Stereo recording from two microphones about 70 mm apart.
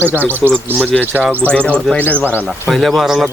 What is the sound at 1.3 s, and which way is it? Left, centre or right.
Speech, right.